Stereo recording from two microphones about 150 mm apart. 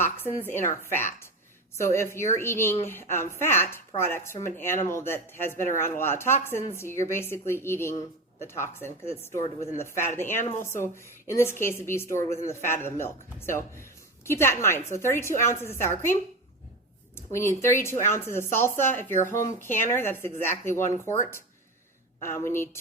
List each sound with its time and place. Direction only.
0.0 s speech: 15° left (ahead or behind)
1.7 s a woman's voice: 20° left (ahead or behind)
17.2 s a woman's voice: 15° left (ahead or behind)